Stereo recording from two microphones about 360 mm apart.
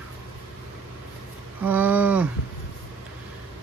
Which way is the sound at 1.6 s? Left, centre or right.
Centre.